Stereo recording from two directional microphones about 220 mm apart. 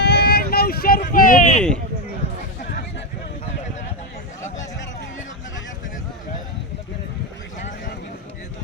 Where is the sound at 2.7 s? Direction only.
45° left (ahead or behind).